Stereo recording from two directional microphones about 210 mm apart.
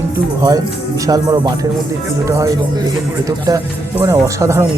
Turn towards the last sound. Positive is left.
turn(degrees=-15)  # may be behind; listen again after turning